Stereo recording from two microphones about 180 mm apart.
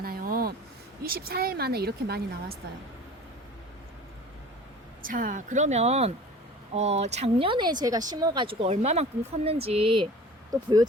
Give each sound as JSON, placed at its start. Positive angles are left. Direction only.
{"t": 0.0, "sound": "a sound", "side_deg": -55}
{"t": 1.0, "sound": "a woman's voice", "side_deg": -55}
{"t": 5.0, "sound": "speech", "side_deg": -50}